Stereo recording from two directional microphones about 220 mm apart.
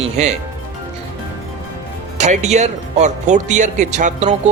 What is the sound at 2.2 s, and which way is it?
Speech, 30° right (ahead or behind).